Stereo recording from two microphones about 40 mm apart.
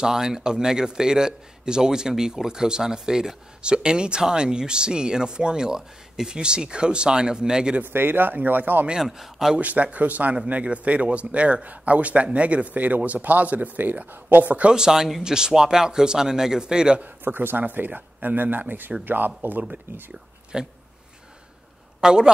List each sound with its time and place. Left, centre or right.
0.0 s speech: centre
7.8 s speech: right
9.0 s a man's voice: centre
9.6 s speech: right
14.4 s speech: right
14.7 s a man's voice: centre
17.0 s speech: right
20.5 s speech: centre
22.0 s a man's voice: right